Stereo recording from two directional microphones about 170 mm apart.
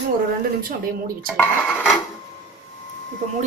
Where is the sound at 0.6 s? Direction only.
55° right (ahead or behind).